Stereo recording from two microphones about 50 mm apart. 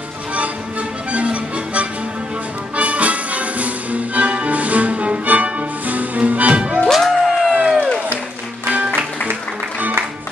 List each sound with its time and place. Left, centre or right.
0.3 s music: right
6.8 s music: centre
7.6 s music: centre
8.6 s music: right